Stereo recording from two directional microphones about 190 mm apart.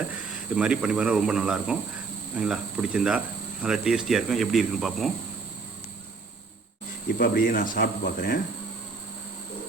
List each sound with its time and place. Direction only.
0.5 s speech: 5° right (ahead or behind)
7.2 s speech: 50° left (ahead or behind)